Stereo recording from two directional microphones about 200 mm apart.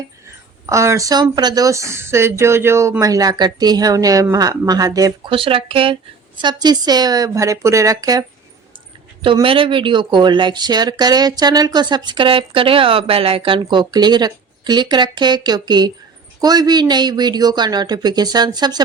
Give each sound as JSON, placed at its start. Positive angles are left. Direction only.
{"t": 0.7, "sound": "speech", "side_deg": -15}
{"t": 9.2, "sound": "speech", "side_deg": -25}